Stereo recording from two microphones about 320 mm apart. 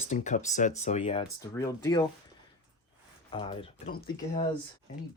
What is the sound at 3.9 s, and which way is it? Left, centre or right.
Speech, left.